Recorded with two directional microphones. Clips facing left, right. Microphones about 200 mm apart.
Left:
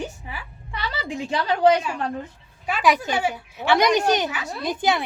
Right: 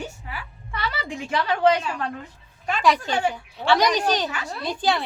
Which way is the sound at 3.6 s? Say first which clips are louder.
Left 2 dB; 25° left (ahead or behind).